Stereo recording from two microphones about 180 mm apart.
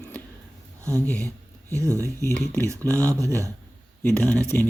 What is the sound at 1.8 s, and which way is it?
Speech, 15° right (ahead or behind).